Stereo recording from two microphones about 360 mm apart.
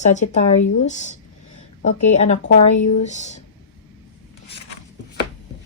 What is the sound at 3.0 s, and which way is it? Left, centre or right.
Speech, centre.